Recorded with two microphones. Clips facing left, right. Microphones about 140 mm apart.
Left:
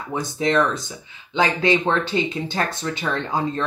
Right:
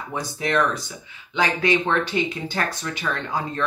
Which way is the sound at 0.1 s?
25° left (ahead or behind).